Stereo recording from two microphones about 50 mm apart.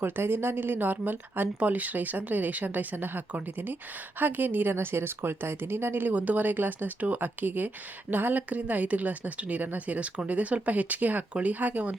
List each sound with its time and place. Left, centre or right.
0.0 s a woman's voice: right